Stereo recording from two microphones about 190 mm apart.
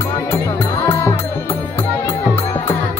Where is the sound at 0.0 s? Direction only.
15° left (ahead or behind).